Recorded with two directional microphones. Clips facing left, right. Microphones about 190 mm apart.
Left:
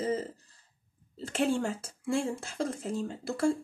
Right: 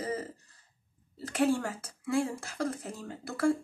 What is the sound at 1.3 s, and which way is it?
Speech, 25° left (ahead or behind).